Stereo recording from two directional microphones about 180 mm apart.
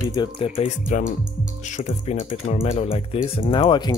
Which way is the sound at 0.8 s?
45° left (ahead or behind).